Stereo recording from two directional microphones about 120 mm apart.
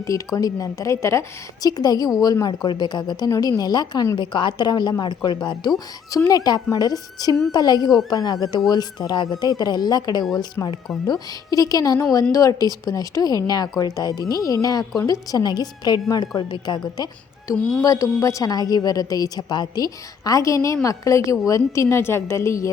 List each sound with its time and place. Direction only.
0.0 s a woman's voice: 30° left (ahead or behind)
6.1 s speech: 25° left (ahead or behind)
10.6 s a woman's voice: 25° left (ahead or behind)
17.6 s music: 10° left (ahead or behind)
17.8 s a woman's voice: 30° left (ahead or behind)